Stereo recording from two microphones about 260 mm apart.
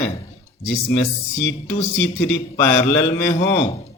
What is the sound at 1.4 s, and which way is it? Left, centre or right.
A man's voice, centre.